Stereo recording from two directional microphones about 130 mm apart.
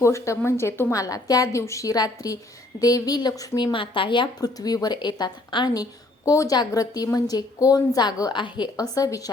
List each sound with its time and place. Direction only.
0.0 s a woman's voice: 20° left (ahead or behind)
3.7 s speech: 40° left (ahead or behind)